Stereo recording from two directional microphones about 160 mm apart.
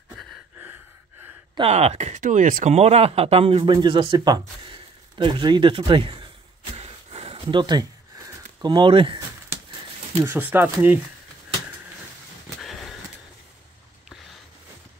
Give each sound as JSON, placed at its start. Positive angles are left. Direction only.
{"t": 1.6, "sound": "speech", "side_deg": -40}
{"t": 2.7, "sound": "speech", "side_deg": -40}
{"t": 6.8, "sound": "a sound", "side_deg": -40}
{"t": 10.2, "sound": "speech", "side_deg": -15}
{"t": 12.5, "sound": "horse", "side_deg": 0}